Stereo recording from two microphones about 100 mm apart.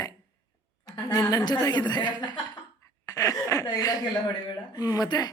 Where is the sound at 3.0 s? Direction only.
35° left (ahead or behind).